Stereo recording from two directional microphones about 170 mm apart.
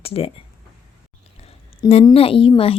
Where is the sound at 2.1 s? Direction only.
35° left (ahead or behind).